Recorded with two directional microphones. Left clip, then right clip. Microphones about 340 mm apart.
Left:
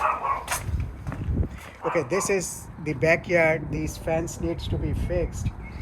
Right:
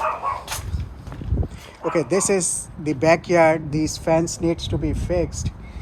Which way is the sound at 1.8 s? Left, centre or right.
Centre.